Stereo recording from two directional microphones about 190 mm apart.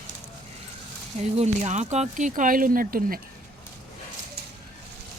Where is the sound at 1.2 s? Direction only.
35° right (ahead or behind).